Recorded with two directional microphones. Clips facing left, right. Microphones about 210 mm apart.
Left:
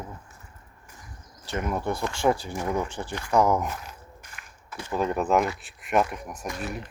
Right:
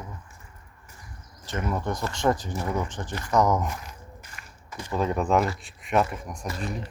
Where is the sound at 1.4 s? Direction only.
10° left (ahead or behind).